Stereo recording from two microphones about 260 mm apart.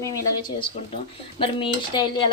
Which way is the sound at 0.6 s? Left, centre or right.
Centre.